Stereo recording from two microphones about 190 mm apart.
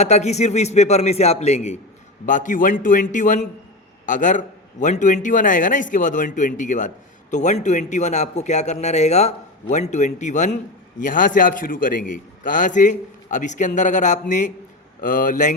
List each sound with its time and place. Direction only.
0.0 s a man's voice: 35° left (ahead or behind)